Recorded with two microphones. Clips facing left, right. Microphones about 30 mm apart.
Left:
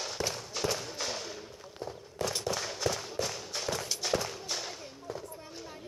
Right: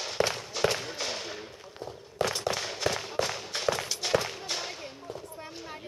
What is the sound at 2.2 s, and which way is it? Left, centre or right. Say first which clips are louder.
Firecracker: right 5 dB; right.